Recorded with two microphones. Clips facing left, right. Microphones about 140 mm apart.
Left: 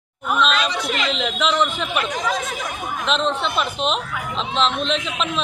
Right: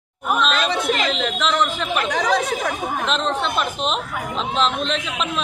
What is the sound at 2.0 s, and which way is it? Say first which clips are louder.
Speech: right 4 dB; 70° right (ahead or behind).